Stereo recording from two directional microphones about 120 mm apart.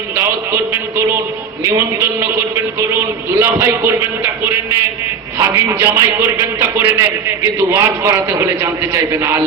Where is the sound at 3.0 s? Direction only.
20° right (ahead or behind).